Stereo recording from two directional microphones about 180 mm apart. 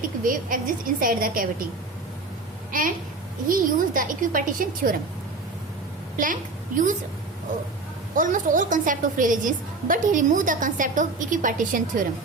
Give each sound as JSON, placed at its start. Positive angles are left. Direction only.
{"t": 0.2, "sound": "a woman's voice", "side_deg": -50}
{"t": 2.7, "sound": "a woman's voice", "side_deg": -50}
{"t": 8.1, "sound": "a woman's voice", "side_deg": -45}